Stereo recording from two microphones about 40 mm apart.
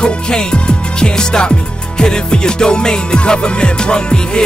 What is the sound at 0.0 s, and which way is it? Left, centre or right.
Music, left.